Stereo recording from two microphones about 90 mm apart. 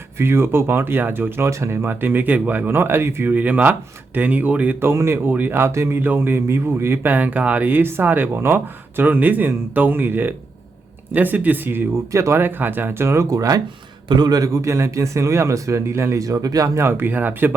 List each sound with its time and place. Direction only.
0.2 s speech: 25° right (ahead or behind)
14.1 s speech: 55° right (ahead or behind); by 17.5 s 20° right (ahead or behind)